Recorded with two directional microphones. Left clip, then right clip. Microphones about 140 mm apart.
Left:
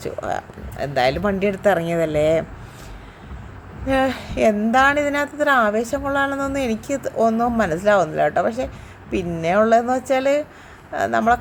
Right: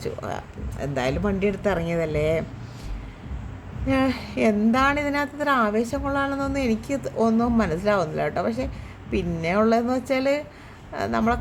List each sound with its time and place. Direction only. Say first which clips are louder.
0.0 s a woman's voice: left 5 dB; 20° left (ahead or behind)
3.8 s a woman's voice: left 4 dB; 20° left (ahead or behind)